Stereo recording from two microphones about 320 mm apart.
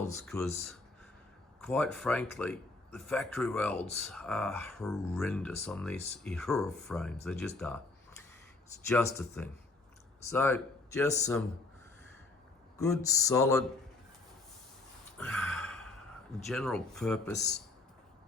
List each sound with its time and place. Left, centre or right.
0.0 s speech: centre
8.9 s speech: centre
12.7 s speech: centre
15.2 s a sound: centre
16.5 s speech: centre
17.3 s speech: left